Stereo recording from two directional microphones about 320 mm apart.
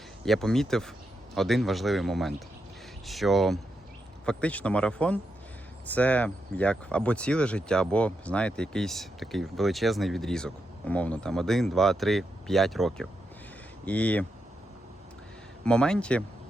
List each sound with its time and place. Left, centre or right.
0.3 s speech: centre
15.6 s speech: centre